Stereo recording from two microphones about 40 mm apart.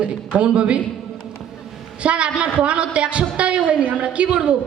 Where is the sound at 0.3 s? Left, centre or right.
Right.